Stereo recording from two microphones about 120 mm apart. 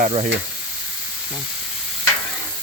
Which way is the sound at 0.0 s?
70° right (ahead or behind).